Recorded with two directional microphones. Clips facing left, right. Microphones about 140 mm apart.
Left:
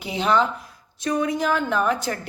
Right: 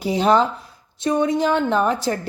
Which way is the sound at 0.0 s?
40° right (ahead or behind).